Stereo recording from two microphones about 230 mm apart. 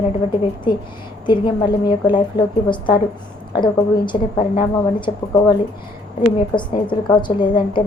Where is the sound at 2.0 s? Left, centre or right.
Centre.